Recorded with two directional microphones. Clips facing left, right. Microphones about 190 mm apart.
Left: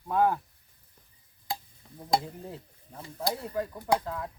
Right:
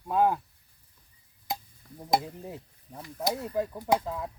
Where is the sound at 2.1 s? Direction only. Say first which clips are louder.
Right 1 dB; 15° right (ahead or behind).